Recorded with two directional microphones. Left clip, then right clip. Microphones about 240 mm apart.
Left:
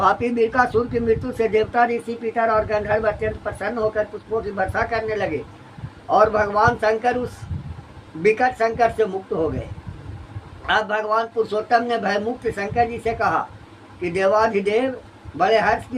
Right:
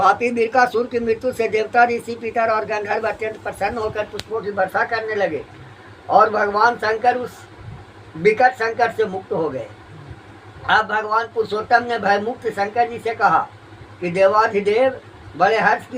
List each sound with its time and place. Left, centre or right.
0.0 s speech: centre
8.2 s speech: centre
10.7 s speech: centre